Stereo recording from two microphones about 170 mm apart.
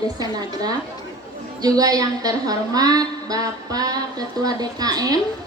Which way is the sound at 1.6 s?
20° right (ahead or behind).